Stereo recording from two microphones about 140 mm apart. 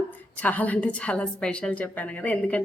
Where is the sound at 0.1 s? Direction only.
10° left (ahead or behind).